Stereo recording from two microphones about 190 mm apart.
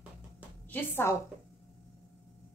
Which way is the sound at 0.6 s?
10° left (ahead or behind).